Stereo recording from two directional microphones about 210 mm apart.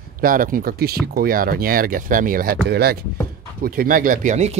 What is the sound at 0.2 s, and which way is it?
Speech, 40° right (ahead or behind).